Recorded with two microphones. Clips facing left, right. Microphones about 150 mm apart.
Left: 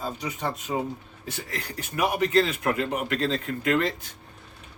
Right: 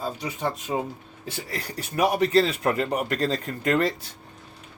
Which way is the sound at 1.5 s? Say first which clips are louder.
Right 3 dB; 35° right (ahead or behind).